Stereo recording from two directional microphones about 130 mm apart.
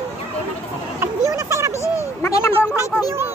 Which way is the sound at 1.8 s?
20° left (ahead or behind).